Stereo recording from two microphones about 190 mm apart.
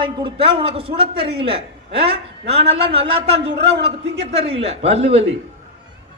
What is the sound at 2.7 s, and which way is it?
Speech, 30° right (ahead or behind).